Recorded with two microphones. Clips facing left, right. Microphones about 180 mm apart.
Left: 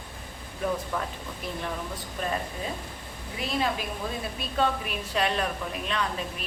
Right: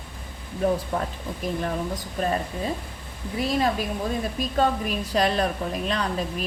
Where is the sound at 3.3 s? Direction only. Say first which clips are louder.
Right 5 dB; 40° right (ahead or behind).